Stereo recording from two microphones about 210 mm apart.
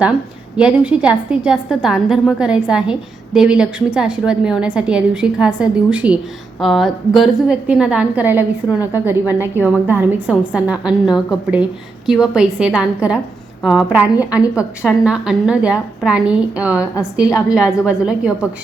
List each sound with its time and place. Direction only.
0.5 s a woman's voice: 5° right (ahead or behind)